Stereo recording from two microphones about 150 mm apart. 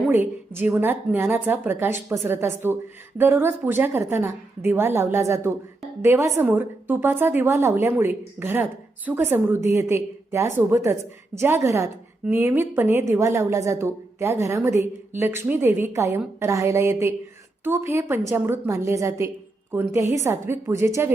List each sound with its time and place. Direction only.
0.0 s a woman's voice: 15° right (ahead or behind)